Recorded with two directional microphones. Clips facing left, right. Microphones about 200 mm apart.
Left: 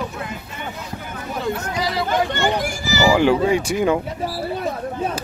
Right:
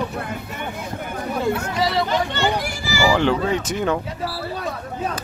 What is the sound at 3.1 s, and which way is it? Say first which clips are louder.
Speech: left 3 dB; 10° left (ahead or behind).